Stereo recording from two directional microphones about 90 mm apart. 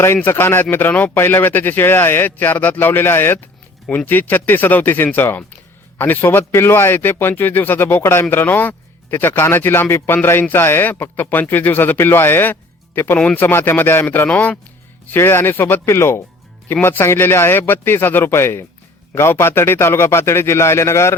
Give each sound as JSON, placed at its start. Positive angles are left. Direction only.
{"t": 0.3, "sound": "speech", "side_deg": 25}
{"t": 13.1, "sound": "speech", "side_deg": 15}
{"t": 13.4, "sound": "speech", "side_deg": 25}